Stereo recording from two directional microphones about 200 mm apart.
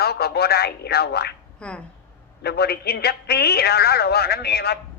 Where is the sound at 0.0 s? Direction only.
50° left (ahead or behind).